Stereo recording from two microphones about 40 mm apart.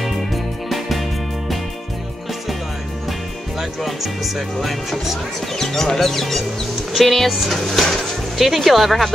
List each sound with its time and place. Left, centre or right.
0.7 s music: centre
3.8 s speech: centre
5.6 s speech: centre